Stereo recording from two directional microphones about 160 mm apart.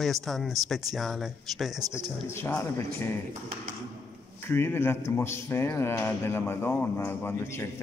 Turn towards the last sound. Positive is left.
turn(degrees=15)  # may be behind; listen again after turning